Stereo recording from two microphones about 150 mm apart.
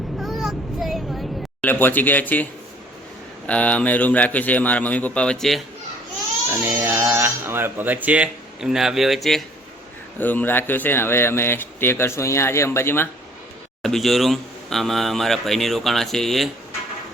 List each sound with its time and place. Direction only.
0.2 s child singing: centre (ahead or behind)
1.6 s speech: 10° left (ahead or behind)
6.8 s speech: 15° right (ahead or behind)
10.2 s speech: 10° left (ahead or behind)
13.8 s a man's voice: centre (ahead or behind)